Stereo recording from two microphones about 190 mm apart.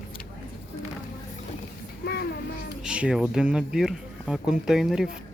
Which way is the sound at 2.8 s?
5° right (ahead or behind).